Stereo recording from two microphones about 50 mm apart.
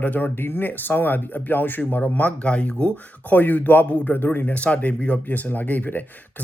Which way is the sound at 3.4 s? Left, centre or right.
Left.